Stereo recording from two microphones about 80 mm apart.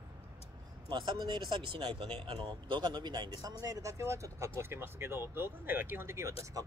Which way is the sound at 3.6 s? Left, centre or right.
Right.